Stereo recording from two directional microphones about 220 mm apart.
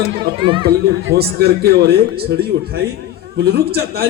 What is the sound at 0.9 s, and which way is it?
A man's voice, 50° right (ahead or behind).